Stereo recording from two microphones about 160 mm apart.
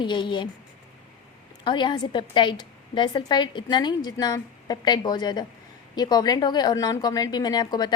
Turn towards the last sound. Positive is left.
turn(degrees=25)  # may be behind; listen again after turning